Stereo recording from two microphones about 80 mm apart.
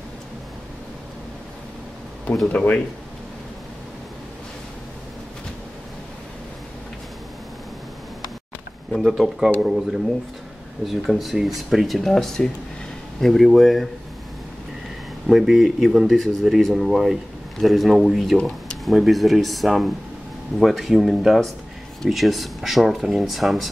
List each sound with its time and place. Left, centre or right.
2.5 s speech: centre
8.9 s speech: centre
15.2 s speech: centre